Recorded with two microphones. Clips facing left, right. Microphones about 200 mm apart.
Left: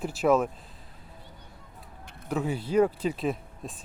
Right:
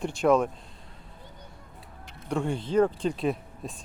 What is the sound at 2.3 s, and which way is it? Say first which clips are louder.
Speech: even; 5° left (ahead or behind).